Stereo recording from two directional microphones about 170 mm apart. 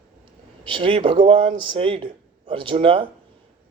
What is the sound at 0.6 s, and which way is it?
Speech, 30° right (ahead or behind).